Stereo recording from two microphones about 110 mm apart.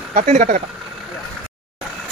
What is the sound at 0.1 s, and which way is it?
Speech, 90° right.